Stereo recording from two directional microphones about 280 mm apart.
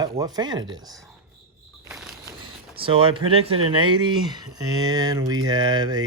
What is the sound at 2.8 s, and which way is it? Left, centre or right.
Speech, centre.